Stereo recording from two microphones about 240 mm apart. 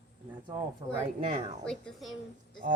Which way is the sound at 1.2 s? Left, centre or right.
Right.